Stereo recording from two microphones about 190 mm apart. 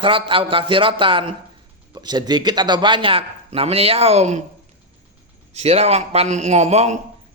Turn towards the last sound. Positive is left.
turn(degrees=-35)  # may be behind; listen again after turning